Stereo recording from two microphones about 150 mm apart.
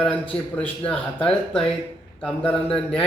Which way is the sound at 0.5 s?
10° left (ahead or behind).